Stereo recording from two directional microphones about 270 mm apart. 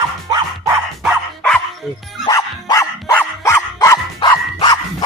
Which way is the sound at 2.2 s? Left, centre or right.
Centre.